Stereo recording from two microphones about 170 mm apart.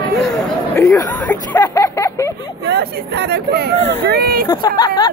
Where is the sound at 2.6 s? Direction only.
80° right.